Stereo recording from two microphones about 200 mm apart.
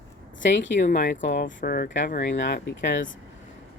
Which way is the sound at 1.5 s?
45° left (ahead or behind).